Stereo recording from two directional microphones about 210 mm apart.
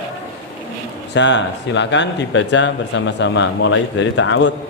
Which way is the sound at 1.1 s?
55° left (ahead or behind).